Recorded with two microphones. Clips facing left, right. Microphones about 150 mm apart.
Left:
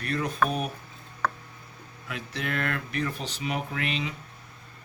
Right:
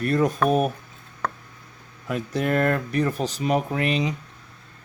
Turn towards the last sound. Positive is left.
turn(degrees=-40)  # may be behind; listen again after turning